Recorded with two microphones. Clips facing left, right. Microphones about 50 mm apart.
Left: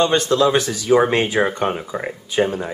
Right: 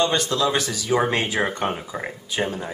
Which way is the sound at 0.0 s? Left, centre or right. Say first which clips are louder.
Left 5 dB; left.